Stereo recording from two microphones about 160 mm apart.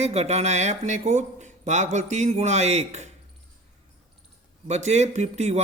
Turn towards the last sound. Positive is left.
turn(degrees=-45)  # may be behind; listen again after turning